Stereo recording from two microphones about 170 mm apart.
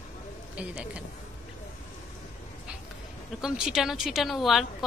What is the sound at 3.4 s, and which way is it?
A woman's voice, 5° right (ahead or behind).